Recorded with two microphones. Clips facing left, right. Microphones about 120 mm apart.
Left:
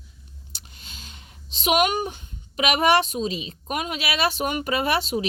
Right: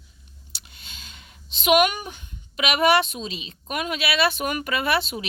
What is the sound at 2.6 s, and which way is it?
A woman's voice, 40° left (ahead or behind).